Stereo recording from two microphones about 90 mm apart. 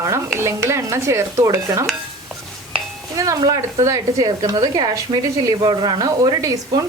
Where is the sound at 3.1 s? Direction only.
40° right (ahead or behind).